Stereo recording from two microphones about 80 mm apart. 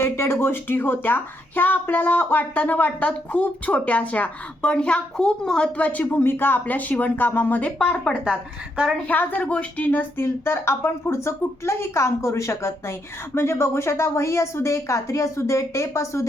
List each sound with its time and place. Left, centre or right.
0.0 s speech: left; by 8.2 s centre
8.2 s a woman's voice: centre
9.0 s speech: left
10.2 s speech: left